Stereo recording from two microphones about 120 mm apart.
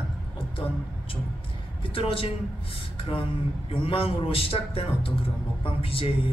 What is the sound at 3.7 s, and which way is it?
A woman's voice, 50° left (ahead or behind).